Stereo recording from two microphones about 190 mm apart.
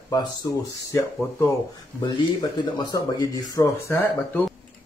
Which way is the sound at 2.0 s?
20° left (ahead or behind).